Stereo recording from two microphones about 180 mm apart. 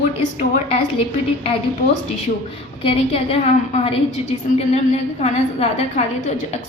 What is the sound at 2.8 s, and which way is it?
A woman's voice, 30° left (ahead or behind).